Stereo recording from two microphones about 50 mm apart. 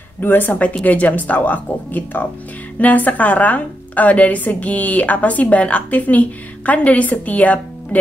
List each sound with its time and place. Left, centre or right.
0.2 s a woman's voice: left